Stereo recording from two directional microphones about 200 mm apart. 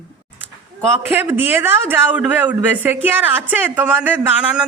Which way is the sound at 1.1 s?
10° right (ahead or behind).